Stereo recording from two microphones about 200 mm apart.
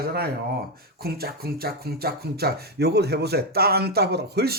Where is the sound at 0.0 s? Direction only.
50° right (ahead or behind).